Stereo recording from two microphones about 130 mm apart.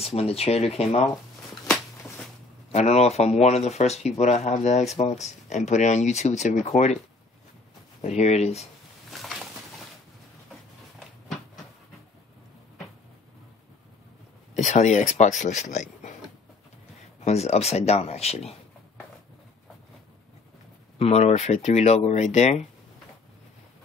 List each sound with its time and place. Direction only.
0.0 s speech: 50° left (ahead or behind)
2.7 s speech: 55° left (ahead or behind)
8.0 s speech: 60° left (ahead or behind)
9.1 s a sound: centre (ahead or behind)
11.0 s a sound: centre (ahead or behind)
14.5 s speech: 65° left (ahead or behind)
17.2 s speech: 55° left (ahead or behind)
21.0 s speech: 50° left (ahead or behind)